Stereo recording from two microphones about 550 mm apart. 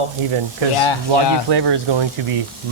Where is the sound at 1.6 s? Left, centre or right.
Right.